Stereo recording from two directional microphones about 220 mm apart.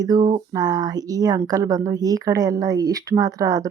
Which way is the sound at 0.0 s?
20° right (ahead or behind).